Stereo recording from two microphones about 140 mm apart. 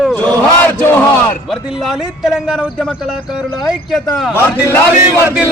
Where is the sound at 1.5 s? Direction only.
Centre (ahead or behind).